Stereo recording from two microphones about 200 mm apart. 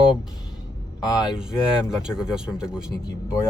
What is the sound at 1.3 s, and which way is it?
Speech, 5° right (ahead or behind).